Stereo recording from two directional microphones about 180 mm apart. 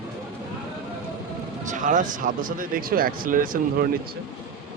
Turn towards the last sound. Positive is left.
turn(degrees=-50)  # may be behind; listen again after turning